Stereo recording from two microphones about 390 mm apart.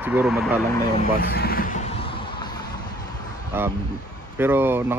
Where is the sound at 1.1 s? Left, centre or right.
Left.